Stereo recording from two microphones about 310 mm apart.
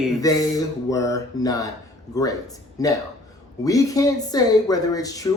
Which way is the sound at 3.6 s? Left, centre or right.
Centre.